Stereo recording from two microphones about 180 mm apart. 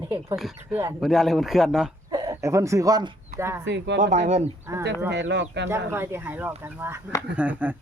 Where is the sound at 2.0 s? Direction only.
20° right (ahead or behind).